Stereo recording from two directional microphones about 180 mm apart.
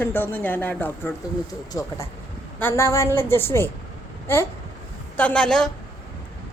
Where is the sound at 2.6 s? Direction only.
15° left (ahead or behind).